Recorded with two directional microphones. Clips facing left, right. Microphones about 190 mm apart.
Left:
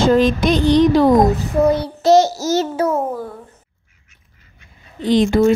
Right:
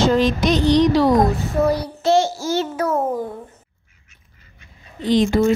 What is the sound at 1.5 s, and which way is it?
Child singing, 20° left (ahead or behind).